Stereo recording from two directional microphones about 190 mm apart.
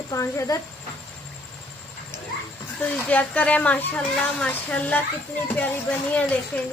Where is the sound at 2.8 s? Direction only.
10° left (ahead or behind).